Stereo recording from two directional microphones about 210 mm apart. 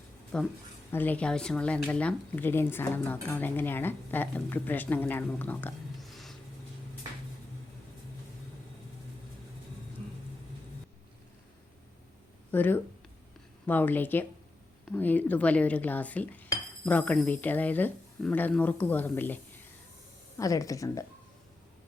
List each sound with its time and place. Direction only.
0.3 s speech: 5° left (ahead or behind)
12.5 s speech: 10° left (ahead or behind)
20.4 s speech: 15° left (ahead or behind)